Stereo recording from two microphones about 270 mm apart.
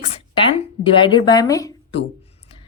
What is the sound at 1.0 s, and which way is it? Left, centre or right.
Speech, centre.